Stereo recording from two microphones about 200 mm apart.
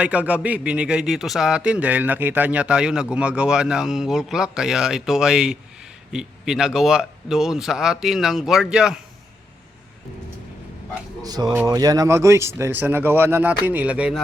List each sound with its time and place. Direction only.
0.0 s a man's voice: 5° right (ahead or behind)
11.2 s speech: 20° right (ahead or behind)